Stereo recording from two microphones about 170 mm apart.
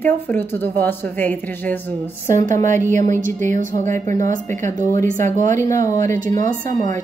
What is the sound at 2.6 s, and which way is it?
Speech, 50° right (ahead or behind).